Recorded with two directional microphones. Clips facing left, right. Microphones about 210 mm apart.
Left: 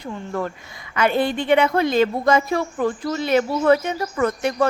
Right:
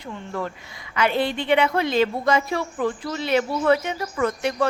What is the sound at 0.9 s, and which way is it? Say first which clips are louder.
A woman's voice: left 3 dB; 50° left (ahead or behind).